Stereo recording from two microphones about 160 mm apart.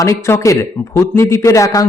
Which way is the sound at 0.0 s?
20° left (ahead or behind).